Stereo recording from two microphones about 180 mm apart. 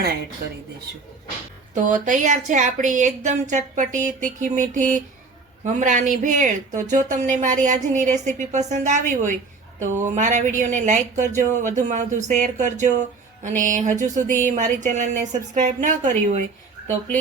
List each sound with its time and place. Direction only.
1.7 s speech: 45° right (ahead or behind)